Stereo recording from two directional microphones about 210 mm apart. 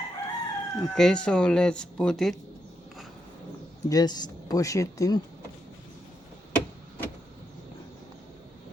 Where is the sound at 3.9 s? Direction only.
20° left (ahead or behind).